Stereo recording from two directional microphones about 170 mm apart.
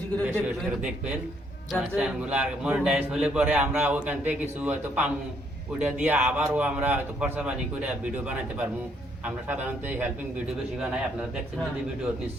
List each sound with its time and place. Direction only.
0.4 s a man's voice: 5° right (ahead or behind)